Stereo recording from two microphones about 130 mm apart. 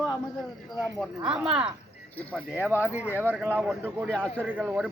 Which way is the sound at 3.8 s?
10° left (ahead or behind).